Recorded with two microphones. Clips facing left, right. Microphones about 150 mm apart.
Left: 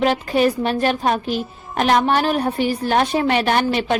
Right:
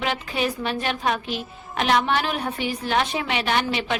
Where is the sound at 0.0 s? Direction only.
40° left (ahead or behind).